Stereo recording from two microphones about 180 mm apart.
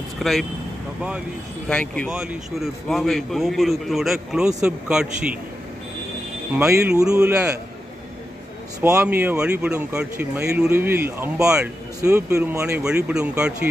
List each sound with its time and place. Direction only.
0.2 s a man's voice: centre (ahead or behind)
1.6 s a man's voice: 5° left (ahead or behind)
6.7 s speech: 15° right (ahead or behind)
7.0 s a man's voice: 5° right (ahead or behind)
8.8 s speech: 15° right (ahead or behind)
12.0 s a man's voice: 15° right (ahead or behind)